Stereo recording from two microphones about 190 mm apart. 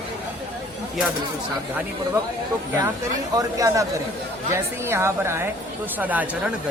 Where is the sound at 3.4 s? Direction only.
15° right (ahead or behind).